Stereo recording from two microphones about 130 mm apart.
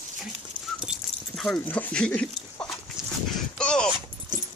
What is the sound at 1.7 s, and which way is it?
Speech, 10° left (ahead or behind).